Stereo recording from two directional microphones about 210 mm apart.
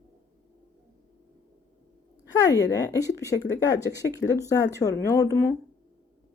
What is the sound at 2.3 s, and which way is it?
Speech, 15° left (ahead or behind).